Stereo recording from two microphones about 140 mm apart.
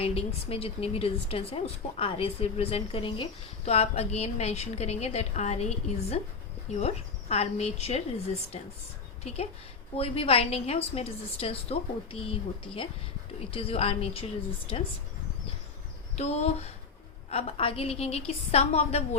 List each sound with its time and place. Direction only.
0.0 s a woman's voice: 45° left (ahead or behind)
16.1 s a woman's voice: 50° left (ahead or behind)